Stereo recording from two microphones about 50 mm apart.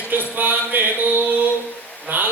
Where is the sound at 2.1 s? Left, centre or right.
Right.